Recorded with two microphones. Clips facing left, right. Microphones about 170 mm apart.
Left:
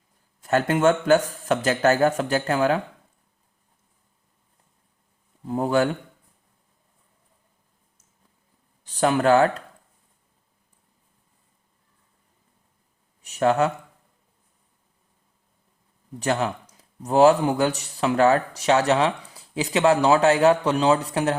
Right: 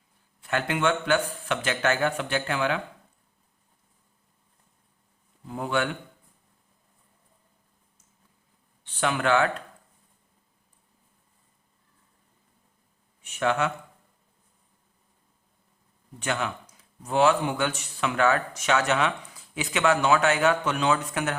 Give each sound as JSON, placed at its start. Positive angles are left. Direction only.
{"t": 0.4, "sound": "speech", "side_deg": 40}
{"t": 5.5, "sound": "speech", "side_deg": 40}
{"t": 8.8, "sound": "speech", "side_deg": 40}
{"t": 13.2, "sound": "speech", "side_deg": 35}
{"t": 16.2, "sound": "speech", "side_deg": 35}